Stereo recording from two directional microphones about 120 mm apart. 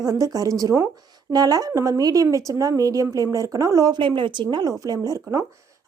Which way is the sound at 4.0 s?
40° right (ahead or behind).